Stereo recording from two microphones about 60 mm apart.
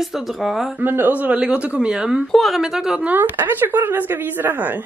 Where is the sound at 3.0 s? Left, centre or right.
Right.